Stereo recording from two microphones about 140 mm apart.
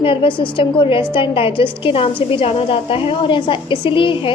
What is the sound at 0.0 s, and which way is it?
A woman's voice, 40° left (ahead or behind).